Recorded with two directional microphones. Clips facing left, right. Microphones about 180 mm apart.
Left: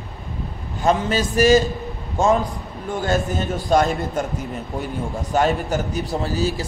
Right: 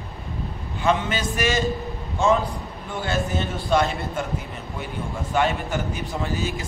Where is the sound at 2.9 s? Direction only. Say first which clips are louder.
Left 5 dB; 45° left (ahead or behind).